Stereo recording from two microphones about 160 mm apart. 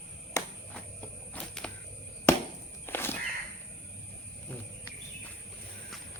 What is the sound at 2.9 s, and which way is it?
Crow, 15° left (ahead or behind).